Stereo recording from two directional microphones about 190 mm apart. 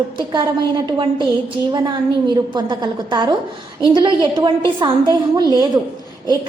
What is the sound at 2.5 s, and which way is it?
A woman's voice, 20° right (ahead or behind).